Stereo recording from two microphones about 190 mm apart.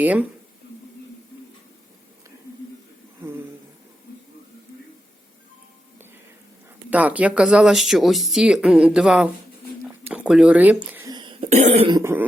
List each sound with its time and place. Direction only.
0.0 s speech: 10° right (ahead or behind)
6.9 s speech: 10° right (ahead or behind)
9.8 s a sound: 5° right (ahead or behind)
11.1 s cough: 25° right (ahead or behind)
11.9 s cough: 20° right (ahead or behind)